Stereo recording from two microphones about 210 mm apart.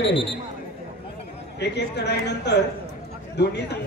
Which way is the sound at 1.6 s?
55° left (ahead or behind).